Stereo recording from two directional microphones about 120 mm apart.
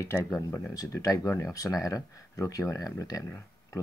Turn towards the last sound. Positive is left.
turn(degrees=30)  # may be behind; listen again after turning